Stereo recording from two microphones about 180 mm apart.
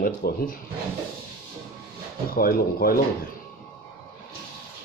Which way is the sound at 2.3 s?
55° left (ahead or behind).